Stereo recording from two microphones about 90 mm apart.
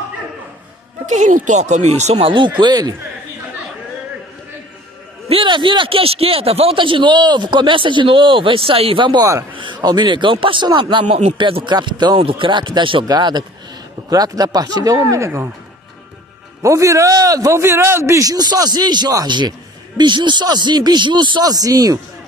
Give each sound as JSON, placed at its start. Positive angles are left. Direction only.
{"t": 2.1, "sound": "a man's voice", "side_deg": -75}
{"t": 5.3, "sound": "a man's voice", "side_deg": -70}
{"t": 12.2, "sound": "a man's voice", "side_deg": -75}
{"t": 13.0, "sound": "speech", "side_deg": -50}
{"t": 16.6, "sound": "a man's voice", "side_deg": -35}